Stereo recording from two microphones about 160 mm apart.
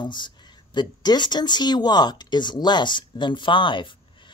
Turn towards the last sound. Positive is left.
turn(degrees=30)  # may be behind; listen again after turning